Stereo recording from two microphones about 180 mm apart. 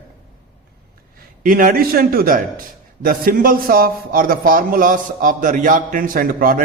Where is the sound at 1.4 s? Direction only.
50° right (ahead or behind).